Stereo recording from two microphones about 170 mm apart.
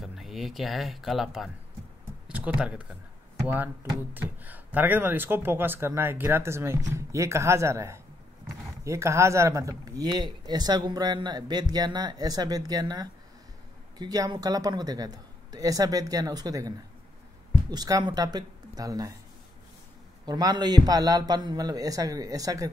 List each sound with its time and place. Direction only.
0.0 s speech: centre (ahead or behind); by 19.1 s 20° right (ahead or behind)
20.2 s speech: 25° right (ahead or behind)